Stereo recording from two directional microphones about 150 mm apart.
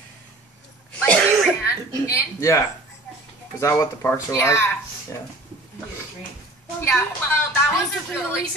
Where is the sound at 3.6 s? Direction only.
15° left (ahead or behind).